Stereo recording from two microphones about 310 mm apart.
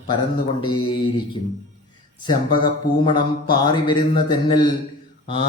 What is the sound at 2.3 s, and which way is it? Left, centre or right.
Speech, centre.